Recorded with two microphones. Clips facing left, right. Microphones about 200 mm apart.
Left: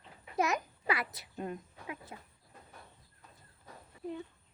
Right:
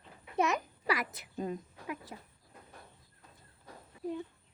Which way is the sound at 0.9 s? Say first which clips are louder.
Right 1 dB; 40° right (ahead or behind).